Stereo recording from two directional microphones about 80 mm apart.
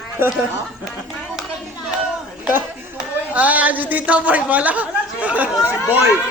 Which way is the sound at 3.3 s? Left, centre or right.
Centre.